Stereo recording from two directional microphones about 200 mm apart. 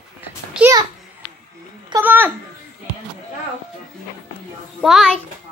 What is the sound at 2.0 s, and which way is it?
Speech, 10° right (ahead or behind).